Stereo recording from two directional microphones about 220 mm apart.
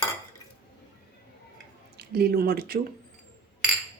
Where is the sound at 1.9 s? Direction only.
45° right (ahead or behind).